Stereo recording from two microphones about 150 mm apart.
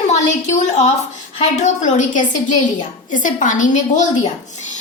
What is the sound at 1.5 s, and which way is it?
A woman's voice, 50° left (ahead or behind).